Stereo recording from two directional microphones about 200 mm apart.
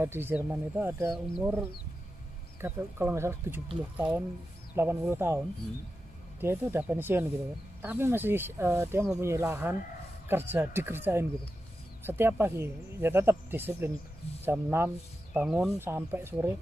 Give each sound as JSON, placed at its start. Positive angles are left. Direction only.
{"t": 0.0, "sound": "speech", "side_deg": -10}
{"t": 6.4, "sound": "speech", "side_deg": -10}